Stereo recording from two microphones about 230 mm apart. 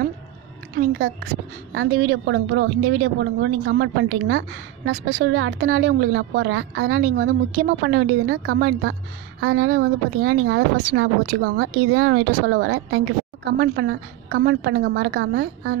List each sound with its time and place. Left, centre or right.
0.9 s a woman's voice: right
7.0 s a woman's voice: right